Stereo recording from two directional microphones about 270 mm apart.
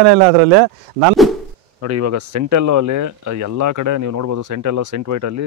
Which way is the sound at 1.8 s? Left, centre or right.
Right.